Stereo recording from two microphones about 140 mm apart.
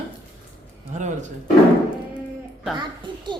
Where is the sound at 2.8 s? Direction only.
35° right (ahead or behind).